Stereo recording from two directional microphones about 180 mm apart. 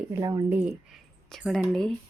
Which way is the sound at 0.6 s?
Centre (ahead or behind).